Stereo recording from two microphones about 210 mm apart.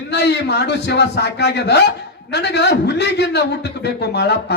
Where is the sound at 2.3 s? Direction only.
55° left (ahead or behind).